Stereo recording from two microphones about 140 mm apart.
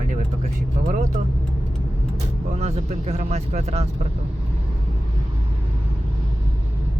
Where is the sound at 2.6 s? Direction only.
55° right (ahead or behind).